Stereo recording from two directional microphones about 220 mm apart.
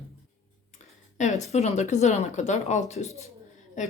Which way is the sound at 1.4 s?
30° left (ahead or behind).